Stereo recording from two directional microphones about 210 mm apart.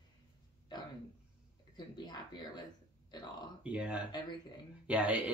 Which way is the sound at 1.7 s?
20° left (ahead or behind).